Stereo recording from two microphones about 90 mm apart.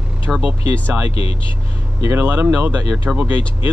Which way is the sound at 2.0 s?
25° right (ahead or behind).